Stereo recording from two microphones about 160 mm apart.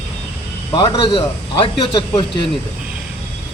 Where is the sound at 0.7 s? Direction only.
30° left (ahead or behind).